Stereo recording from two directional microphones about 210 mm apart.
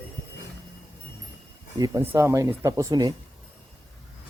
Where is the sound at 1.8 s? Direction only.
15° right (ahead or behind).